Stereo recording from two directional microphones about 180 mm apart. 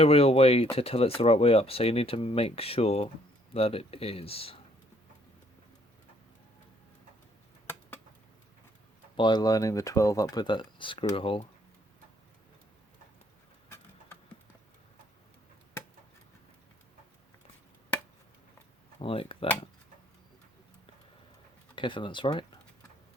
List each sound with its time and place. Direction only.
0.0 s speech: 35° left (ahead or behind)
9.1 s speech: 25° left (ahead or behind)
18.9 s speech: 30° left (ahead or behind)
21.8 s speech: 25° left (ahead or behind)